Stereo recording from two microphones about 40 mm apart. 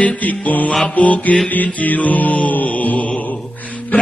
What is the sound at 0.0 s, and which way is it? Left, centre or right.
Music, left.